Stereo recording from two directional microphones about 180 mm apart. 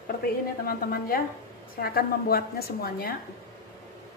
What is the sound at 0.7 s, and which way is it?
A woman's voice, 55° left (ahead or behind).